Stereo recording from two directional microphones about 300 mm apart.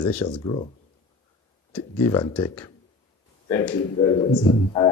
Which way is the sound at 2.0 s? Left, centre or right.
Centre.